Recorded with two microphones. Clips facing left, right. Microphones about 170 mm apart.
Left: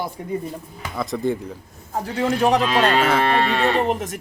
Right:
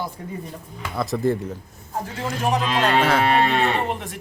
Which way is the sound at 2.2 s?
65° left (ahead or behind).